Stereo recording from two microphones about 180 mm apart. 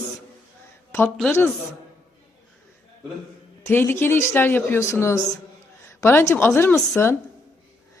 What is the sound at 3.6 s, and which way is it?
Speech, 10° left (ahead or behind).